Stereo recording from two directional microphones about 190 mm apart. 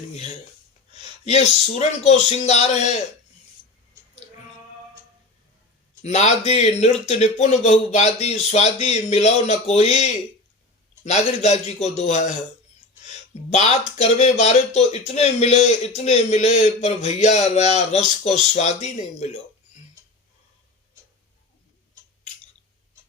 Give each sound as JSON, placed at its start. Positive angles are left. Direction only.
{"t": 1.0, "sound": "speech", "side_deg": 35}
{"t": 6.0, "sound": "speech", "side_deg": 35}
{"t": 13.5, "sound": "speech", "side_deg": 35}